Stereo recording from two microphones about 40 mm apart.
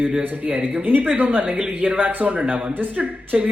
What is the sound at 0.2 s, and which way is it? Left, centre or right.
A man's voice, right.